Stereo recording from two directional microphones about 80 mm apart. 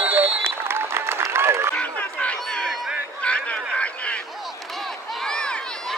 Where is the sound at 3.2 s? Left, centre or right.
Centre.